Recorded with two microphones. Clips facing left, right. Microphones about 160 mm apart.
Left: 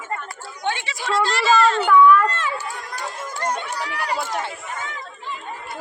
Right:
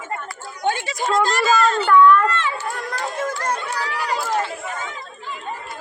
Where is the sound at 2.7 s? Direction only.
60° right (ahead or behind).